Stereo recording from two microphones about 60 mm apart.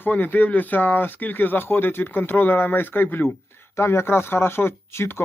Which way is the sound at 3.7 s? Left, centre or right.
Left.